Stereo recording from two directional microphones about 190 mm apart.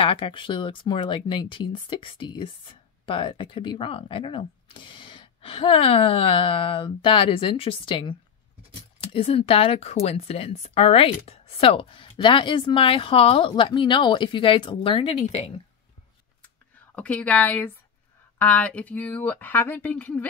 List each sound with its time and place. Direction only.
0.0 s speech: 25° left (ahead or behind)
16.9 s speech: 10° left (ahead or behind)